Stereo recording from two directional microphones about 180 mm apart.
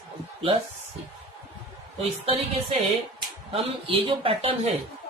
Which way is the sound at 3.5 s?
30° right (ahead or behind).